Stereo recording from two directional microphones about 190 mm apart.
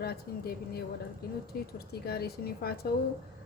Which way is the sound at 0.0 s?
55° left (ahead or behind).